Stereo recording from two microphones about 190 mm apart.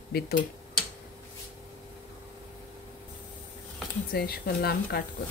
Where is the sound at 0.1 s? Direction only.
55° left (ahead or behind).